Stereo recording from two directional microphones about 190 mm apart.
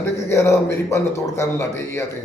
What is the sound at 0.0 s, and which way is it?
Speech, 15° left (ahead or behind).